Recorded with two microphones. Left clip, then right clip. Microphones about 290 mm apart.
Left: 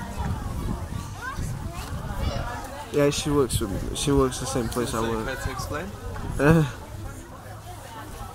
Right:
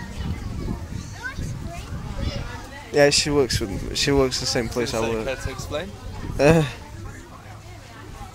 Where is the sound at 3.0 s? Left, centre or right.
Centre.